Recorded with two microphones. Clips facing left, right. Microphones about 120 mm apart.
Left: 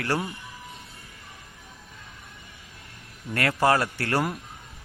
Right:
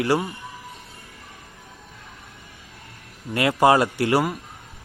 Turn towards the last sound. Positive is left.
turn(degrees=-15)  # may be behind; listen again after turning